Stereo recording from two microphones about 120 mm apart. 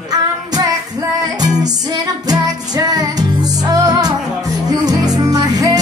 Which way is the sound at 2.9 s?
30° right (ahead or behind).